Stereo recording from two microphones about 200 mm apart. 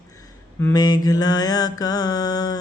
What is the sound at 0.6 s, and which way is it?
Mantra, 15° left (ahead or behind).